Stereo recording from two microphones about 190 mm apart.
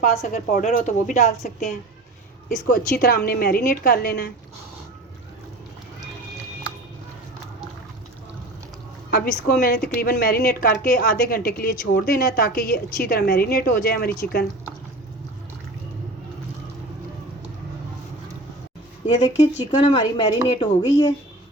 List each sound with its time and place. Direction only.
0.0 s a woman's voice: 45° left (ahead or behind)
2.6 s a woman's voice: 50° left (ahead or behind)
9.0 s a woman's voice: 55° left (ahead or behind)
19.1 s speech: 40° left (ahead or behind)
19.7 s speech: 20° left (ahead or behind)